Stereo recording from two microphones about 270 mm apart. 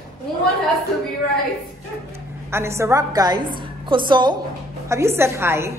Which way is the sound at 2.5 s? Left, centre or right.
Centre.